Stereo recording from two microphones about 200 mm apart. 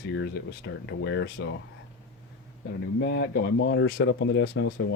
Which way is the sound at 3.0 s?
60° left (ahead or behind).